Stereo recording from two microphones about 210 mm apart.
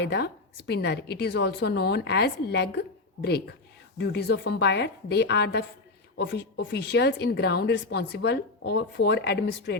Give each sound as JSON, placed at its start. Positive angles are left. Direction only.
{"t": 0.0, "sound": "speech", "side_deg": 55}